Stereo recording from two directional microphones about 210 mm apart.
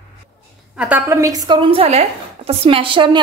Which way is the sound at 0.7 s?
10° right (ahead or behind).